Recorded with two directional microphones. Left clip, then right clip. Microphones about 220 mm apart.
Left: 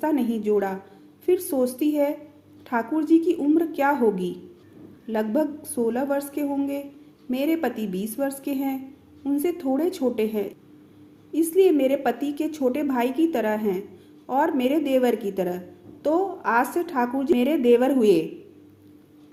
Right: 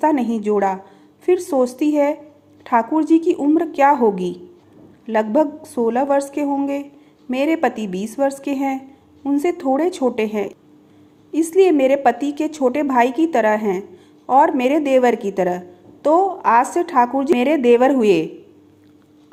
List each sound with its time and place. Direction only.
0.0 s a woman's voice: 20° right (ahead or behind)